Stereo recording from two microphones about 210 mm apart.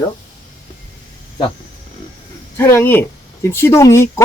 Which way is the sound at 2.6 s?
10° left (ahead or behind).